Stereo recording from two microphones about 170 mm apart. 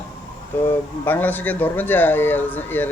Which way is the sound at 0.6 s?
10° left (ahead or behind).